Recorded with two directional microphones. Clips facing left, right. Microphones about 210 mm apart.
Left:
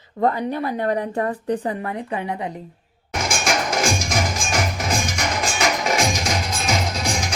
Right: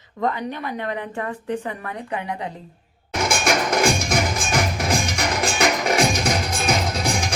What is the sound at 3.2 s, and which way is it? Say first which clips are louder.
Music: right 2 dB; 55° right (ahead or behind).